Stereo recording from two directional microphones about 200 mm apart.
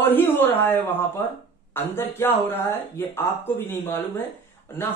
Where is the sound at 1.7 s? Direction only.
10° left (ahead or behind).